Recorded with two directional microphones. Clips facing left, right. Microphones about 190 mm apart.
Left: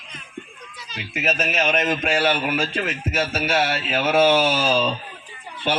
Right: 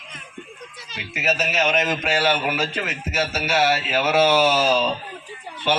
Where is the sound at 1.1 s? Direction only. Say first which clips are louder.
Even; 55° left (ahead or behind).